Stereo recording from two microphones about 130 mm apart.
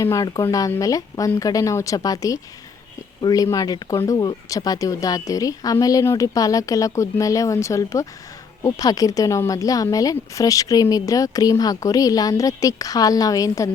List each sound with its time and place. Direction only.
0.0 s speech: 25° left (ahead or behind)